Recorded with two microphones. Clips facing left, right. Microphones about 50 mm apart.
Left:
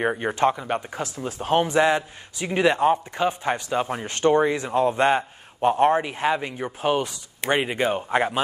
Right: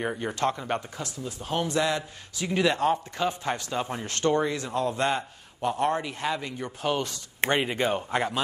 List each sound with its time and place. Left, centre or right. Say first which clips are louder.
0.0 s a man's voice: left 6 dB; left
0.6 s speech: left 3 dB; centre
0.8 s speech: left 6 dB; left
1.1 s speech: left 9 dB; left
1.7 s a man's voice: left 6 dB; left